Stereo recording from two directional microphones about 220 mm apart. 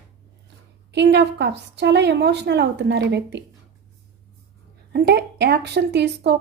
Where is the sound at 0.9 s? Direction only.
50° right (ahead or behind).